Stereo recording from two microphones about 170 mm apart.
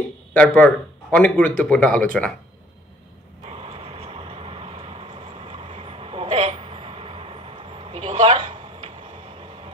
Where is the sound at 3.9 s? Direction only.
35° right (ahead or behind).